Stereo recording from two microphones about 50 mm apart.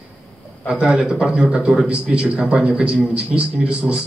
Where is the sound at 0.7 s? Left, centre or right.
Centre.